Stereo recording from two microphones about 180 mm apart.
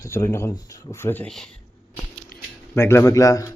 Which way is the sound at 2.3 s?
55° left (ahead or behind).